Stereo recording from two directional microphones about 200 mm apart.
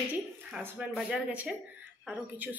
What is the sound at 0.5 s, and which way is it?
A woman's voice, 5° right (ahead or behind).